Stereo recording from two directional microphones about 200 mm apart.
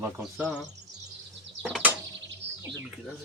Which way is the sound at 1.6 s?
5° right (ahead or behind).